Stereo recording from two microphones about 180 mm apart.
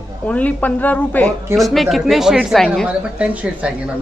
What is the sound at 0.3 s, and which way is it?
A woman's voice, 10° left (ahead or behind).